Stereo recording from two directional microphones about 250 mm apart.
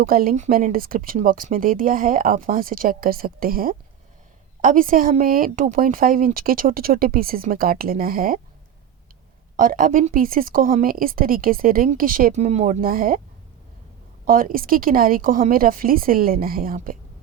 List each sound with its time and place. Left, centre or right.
0.0 s speech: right
9.6 s speech: right
14.3 s speech: right